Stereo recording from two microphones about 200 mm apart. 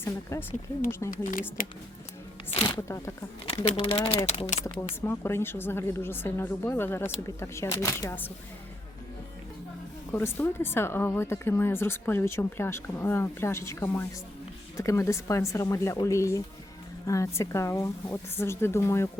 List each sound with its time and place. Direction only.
0.0 s speech: 10° left (ahead or behind)
1.1 s speech: 45° left (ahead or behind)
2.5 s speech: 25° left (ahead or behind)
3.5 s speech: 25° left (ahead or behind)
4.6 s speech: 15° left (ahead or behind)
10.1 s speech: 10° left (ahead or behind)